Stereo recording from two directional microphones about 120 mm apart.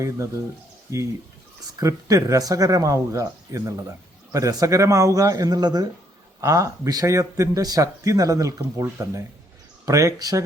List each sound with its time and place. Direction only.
0.0 s speech: 25° right (ahead or behind)